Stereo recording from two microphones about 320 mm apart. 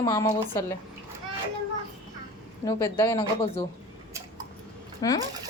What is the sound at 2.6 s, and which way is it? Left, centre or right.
A woman's voice, centre.